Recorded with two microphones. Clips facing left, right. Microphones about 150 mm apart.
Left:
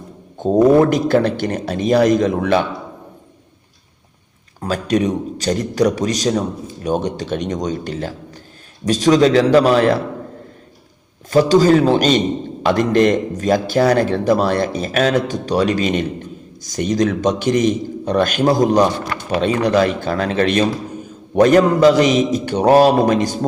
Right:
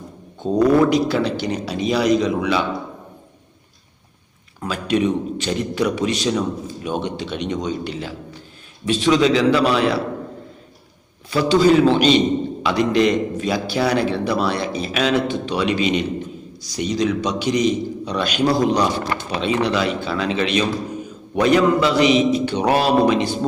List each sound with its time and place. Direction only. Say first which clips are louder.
0.3 s a sound: left 5 dB; 45° left (ahead or behind)
0.9 s a man's voice: left 3 dB; 50° left (ahead or behind)
4.6 s a man's voice: left 2 dB; 40° left (ahead or behind)
11.3 s a man's voice: left 3 dB; 45° left (ahead or behind)